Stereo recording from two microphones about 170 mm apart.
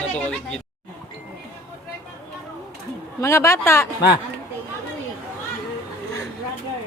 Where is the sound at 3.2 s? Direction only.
15° left (ahead or behind).